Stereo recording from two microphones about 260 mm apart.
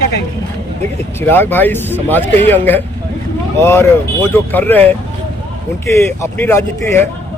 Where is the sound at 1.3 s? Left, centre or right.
Centre.